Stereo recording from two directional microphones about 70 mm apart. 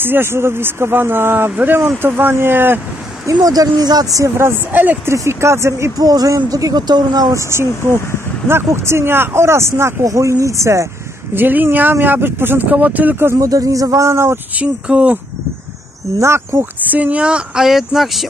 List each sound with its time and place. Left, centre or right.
0.0 s speech: right
3.3 s speech: right
4.4 s speech: right
5.1 s speech: right
5.9 s speech: right
7.3 s speech: right
11.3 s speech: right
13.4 s speech: right
14.6 s speech: centre
16.2 s speech: right
16.8 s speech: right; by 18.2 s centre